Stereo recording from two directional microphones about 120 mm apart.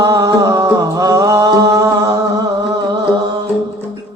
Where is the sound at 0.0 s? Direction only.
30° right (ahead or behind).